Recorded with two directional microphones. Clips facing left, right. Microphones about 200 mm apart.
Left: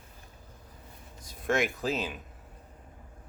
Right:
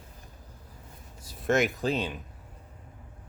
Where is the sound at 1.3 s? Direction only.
Centre (ahead or behind).